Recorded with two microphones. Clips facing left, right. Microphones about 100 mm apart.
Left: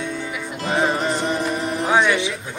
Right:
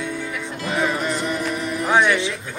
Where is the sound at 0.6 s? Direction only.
30° left (ahead or behind).